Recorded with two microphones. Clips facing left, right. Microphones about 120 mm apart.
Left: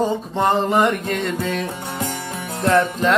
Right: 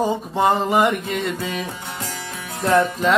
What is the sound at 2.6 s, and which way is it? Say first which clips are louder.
Music: even; centre (ahead or behind).